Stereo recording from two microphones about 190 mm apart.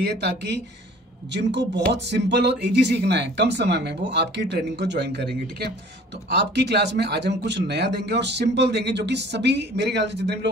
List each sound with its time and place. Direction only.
0.0 s speech: 60° right (ahead or behind)